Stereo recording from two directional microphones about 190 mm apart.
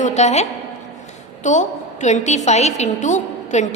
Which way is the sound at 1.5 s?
40° left (ahead or behind).